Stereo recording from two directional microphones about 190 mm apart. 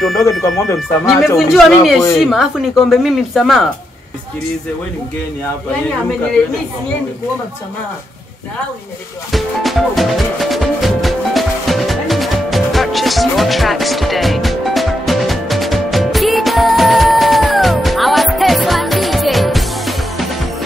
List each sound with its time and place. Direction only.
0.2 s speech: 15° left (ahead or behind)
0.7 s speech: centre (ahead or behind)
9.3 s music: centre (ahead or behind)